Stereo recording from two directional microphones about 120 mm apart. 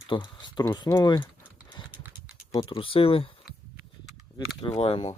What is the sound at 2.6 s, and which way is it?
Speech, 50° left (ahead or behind).